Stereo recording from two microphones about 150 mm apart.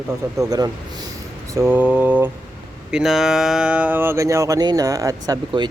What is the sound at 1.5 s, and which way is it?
Speech, 15° right (ahead or behind).